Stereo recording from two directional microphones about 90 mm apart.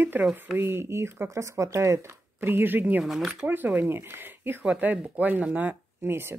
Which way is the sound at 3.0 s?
Centre (ahead or behind).